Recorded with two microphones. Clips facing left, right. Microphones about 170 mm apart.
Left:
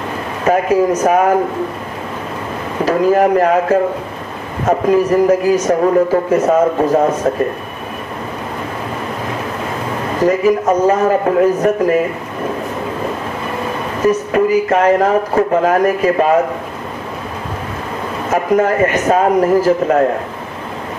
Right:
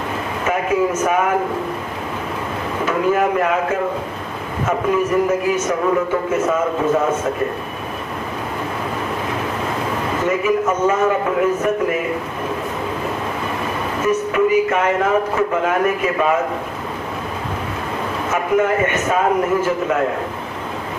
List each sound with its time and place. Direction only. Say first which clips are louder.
0.5 s speech: left 6 dB; 35° left (ahead or behind)
2.8 s speech: left 6 dB; 35° left (ahead or behind)
4.6 s speech: left 6 dB; 35° left (ahead or behind)
10.2 s speech: left 6 dB; 35° left (ahead or behind)
14.0 s speech: left 4 dB; 35° left (ahead or behind)
18.3 s speech: left 4 dB; 35° left (ahead or behind)